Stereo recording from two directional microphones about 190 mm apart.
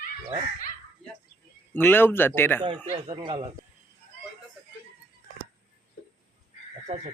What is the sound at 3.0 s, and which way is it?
Speech, 25° right (ahead or behind).